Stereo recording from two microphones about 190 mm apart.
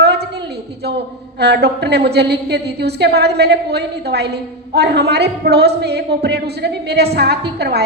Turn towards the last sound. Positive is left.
turn(degrees=-60)  # may be behind; listen again after turning